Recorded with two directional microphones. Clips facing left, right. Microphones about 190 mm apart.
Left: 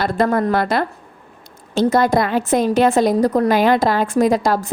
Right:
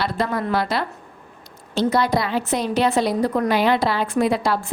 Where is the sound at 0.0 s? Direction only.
50° left (ahead or behind).